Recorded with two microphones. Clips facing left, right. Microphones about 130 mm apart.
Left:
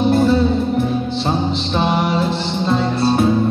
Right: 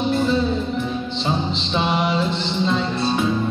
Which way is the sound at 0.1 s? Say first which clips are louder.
Left 5 dB; 50° left (ahead or behind).